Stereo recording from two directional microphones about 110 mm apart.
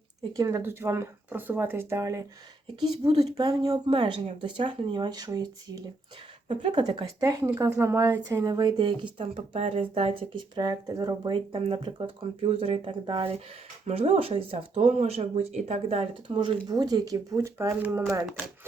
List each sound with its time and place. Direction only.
0.3 s a woman's voice: 30° right (ahead or behind)
3.7 s speech: 55° right (ahead or behind); by 5.8 s 35° right (ahead or behind)
6.5 s a woman's voice: 50° right (ahead or behind); by 10.2 s 65° right (ahead or behind)
10.3 s a woman's voice: 40° right (ahead or behind)
11.3 s speech: 55° right (ahead or behind)
13.8 s speech: 75° right (ahead or behind)
16.3 s speech: 50° right (ahead or behind)
16.6 s a woman's voice: 35° right (ahead or behind)
18.3 s speech: 5° right (ahead or behind)